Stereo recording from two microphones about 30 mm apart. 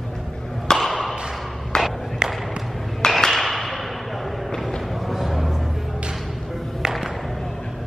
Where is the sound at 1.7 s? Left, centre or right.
Left.